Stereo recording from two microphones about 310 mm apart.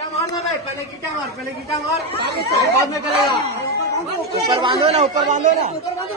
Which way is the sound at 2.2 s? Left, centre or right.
Right.